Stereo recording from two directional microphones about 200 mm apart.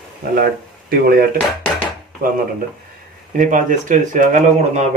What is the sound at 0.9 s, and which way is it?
Speech, 45° right (ahead or behind).